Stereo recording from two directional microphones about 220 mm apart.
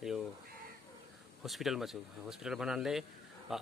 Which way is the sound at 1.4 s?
Centre (ahead or behind).